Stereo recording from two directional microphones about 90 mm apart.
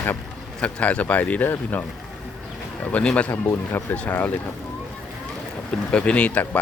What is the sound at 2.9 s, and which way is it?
Speech, 15° left (ahead or behind).